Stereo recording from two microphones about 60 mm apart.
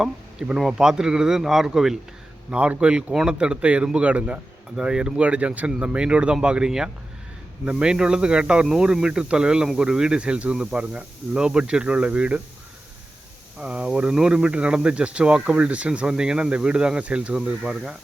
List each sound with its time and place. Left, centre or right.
0.0 s speech: centre
2.5 s a man's voice: right
13.6 s speech: centre